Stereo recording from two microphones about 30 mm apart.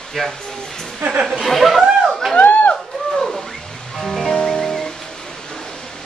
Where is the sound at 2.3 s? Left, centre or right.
Left.